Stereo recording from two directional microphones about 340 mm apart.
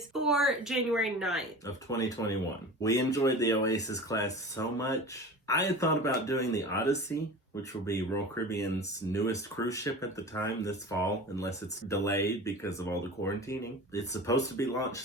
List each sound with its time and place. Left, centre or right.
0.1 s a woman's voice: centre
1.6 s speech: centre